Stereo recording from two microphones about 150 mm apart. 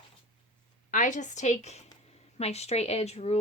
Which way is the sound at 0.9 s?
55° left (ahead or behind).